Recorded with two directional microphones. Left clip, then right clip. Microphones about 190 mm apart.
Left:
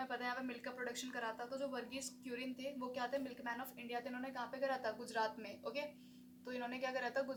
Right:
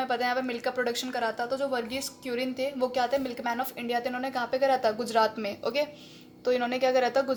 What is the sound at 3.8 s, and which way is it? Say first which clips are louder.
A woman's voice: right 15 dB; 50° right (ahead or behind).